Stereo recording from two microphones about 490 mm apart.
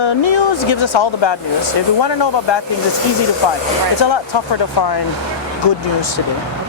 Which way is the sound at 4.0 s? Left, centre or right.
Left.